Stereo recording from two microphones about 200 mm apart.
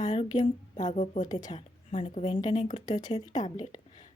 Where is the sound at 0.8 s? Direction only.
35° left (ahead or behind); by 3.8 s 20° left (ahead or behind).